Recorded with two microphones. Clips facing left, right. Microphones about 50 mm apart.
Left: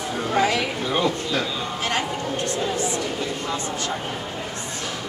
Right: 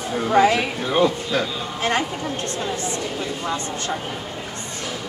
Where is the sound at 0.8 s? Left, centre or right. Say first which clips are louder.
Right 3 dB; centre.